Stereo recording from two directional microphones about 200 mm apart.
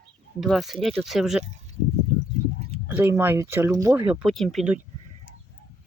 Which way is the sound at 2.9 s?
10° right (ahead or behind).